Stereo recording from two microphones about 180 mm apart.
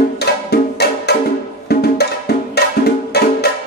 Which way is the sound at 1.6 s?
65° left (ahead or behind).